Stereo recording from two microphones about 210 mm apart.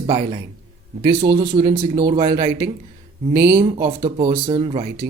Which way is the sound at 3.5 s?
20° right (ahead or behind).